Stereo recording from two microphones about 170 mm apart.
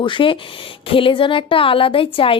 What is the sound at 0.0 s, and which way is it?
A woman's voice, 30° left (ahead or behind).